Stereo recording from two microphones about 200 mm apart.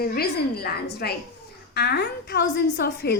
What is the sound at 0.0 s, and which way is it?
A woman's voice, 50° left (ahead or behind).